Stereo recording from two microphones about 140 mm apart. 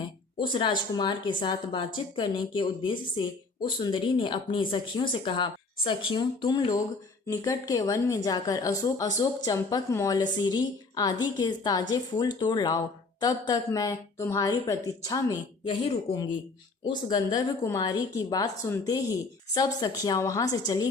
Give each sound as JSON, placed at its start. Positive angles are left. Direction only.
{"t": 0.5, "sound": "a woman's voice", "side_deg": 35}
{"t": 17.1, "sound": "a woman's voice", "side_deg": 25}